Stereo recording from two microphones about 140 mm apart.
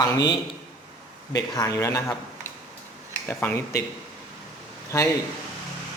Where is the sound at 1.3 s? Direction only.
25° left (ahead or behind).